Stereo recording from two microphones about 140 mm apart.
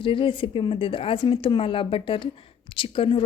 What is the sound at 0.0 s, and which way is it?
Speech, 40° left (ahead or behind).